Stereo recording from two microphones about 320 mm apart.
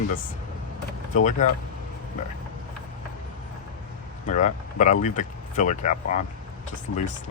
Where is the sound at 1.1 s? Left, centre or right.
Left.